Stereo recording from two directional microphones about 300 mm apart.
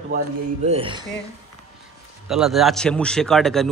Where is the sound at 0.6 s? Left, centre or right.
Centre.